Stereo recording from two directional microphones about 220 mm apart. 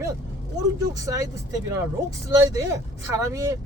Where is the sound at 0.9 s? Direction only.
15° right (ahead or behind).